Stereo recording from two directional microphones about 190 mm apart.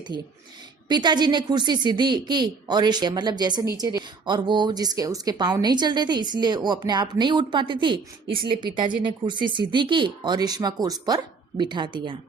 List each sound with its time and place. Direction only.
0.1 s speech: 60° right (ahead or behind)
0.9 s a woman's voice: 20° right (ahead or behind)